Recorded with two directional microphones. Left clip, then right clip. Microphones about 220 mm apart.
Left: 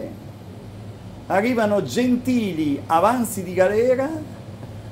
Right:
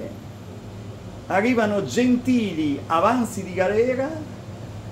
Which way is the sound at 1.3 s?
20° left (ahead or behind).